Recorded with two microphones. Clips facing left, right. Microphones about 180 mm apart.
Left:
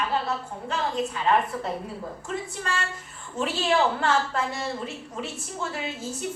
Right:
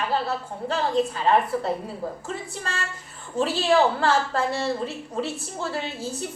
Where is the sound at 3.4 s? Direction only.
35° right (ahead or behind).